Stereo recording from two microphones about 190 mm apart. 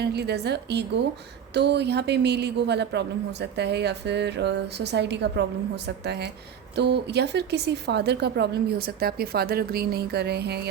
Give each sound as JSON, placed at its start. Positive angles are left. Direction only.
{"t": 0.0, "sound": "a woman's voice", "side_deg": -60}